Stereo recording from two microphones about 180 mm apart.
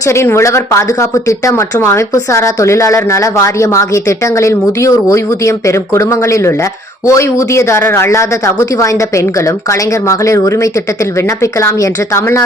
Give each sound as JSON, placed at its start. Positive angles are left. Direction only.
{"t": 0.1, "sound": "speech", "side_deg": 15}